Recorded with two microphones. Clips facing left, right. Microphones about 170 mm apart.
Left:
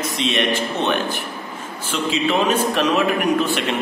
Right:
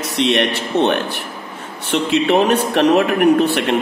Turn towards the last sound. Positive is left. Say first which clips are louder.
# right 6 dB
turn(degrees=-65)  # may be behind; listen again after turning